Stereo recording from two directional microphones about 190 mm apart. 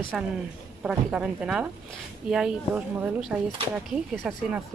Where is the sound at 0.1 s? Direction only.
Centre (ahead or behind).